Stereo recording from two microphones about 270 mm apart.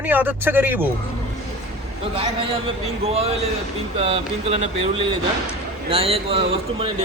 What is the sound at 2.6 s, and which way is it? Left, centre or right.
A man's voice, right.